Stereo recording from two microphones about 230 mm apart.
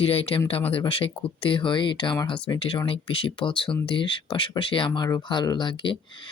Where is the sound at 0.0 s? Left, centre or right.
Left.